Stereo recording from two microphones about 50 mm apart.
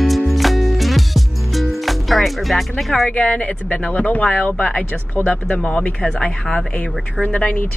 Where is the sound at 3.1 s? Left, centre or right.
Centre.